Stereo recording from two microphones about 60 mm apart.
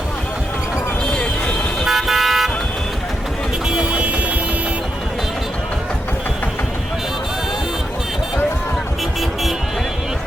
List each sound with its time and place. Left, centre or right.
1.8 s car: centre
3.7 s vehicle: centre